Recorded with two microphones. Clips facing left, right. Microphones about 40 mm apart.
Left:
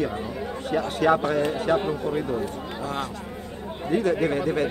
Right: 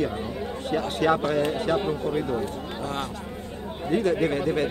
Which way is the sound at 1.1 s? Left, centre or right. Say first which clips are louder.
Left 2 dB; left.